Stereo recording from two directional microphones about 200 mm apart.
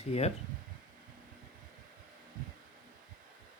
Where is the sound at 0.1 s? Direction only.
30° left (ahead or behind).